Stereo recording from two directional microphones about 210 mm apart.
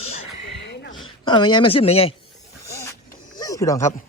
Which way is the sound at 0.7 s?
55° left (ahead or behind).